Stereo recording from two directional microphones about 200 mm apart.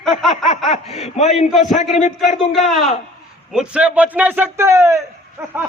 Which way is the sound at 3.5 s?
5° right (ahead or behind).